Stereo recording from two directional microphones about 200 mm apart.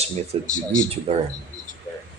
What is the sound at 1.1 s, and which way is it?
Speech, 30° right (ahead or behind).